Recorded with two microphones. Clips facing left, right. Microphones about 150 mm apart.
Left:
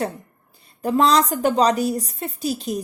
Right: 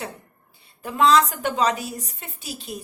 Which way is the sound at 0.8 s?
40° left (ahead or behind).